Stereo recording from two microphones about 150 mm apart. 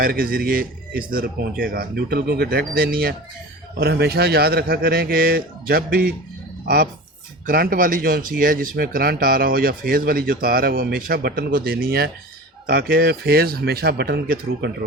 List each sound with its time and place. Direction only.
0.0 s a man's voice: 75° right (ahead or behind)
7.4 s a man's voice: 80° right